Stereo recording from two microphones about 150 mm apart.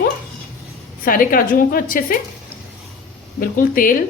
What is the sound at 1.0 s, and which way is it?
A woman's voice, 70° left (ahead or behind).